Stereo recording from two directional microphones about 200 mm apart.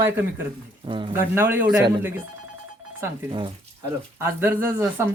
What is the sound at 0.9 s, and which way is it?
Speech, 25° right (ahead or behind).